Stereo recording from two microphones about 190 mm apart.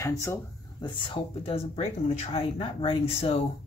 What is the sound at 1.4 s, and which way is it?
Speech, 30° left (ahead or behind).